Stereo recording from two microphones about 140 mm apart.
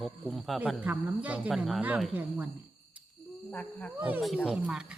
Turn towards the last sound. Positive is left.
turn(degrees=-5)  # may be behind; listen again after turning